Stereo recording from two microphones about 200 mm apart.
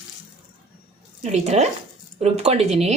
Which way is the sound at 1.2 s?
35° right (ahead or behind).